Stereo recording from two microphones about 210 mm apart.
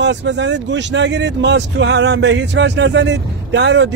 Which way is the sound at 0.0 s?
55° right (ahead or behind).